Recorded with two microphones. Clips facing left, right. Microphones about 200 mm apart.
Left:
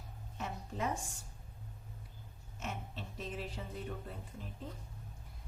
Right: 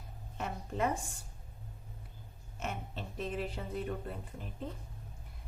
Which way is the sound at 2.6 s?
60° right (ahead or behind).